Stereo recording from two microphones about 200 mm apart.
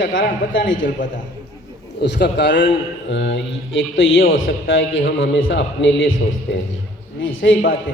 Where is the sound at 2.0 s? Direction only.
55° left (ahead or behind).